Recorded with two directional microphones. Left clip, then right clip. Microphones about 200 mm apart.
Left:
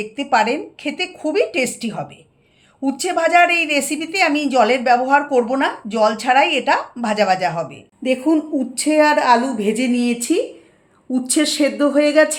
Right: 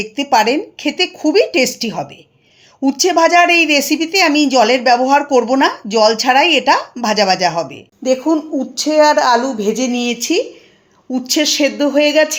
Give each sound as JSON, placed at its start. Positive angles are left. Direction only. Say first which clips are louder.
{"t": 0.0, "sound": "speech", "louder": "right 4 dB", "side_deg": -45}
{"t": 8.0, "sound": "a woman's voice", "louder": "right 3 dB", "side_deg": -5}